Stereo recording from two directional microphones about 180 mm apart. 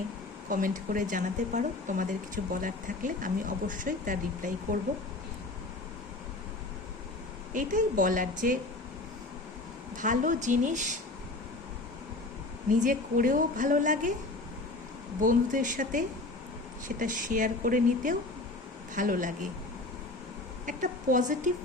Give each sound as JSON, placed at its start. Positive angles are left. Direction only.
{"t": 0.5, "sound": "speech", "side_deg": -45}
{"t": 7.5, "sound": "speech", "side_deg": -45}
{"t": 10.0, "sound": "speech", "side_deg": -45}
{"t": 12.8, "sound": "speech", "side_deg": -45}
{"t": 15.2, "sound": "speech", "side_deg": -45}
{"t": 20.7, "sound": "speech", "side_deg": -45}